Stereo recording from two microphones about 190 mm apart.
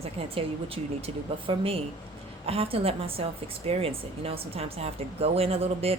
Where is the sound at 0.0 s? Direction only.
30° right (ahead or behind).